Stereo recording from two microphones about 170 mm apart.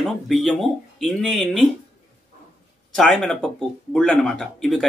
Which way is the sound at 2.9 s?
Centre (ahead or behind).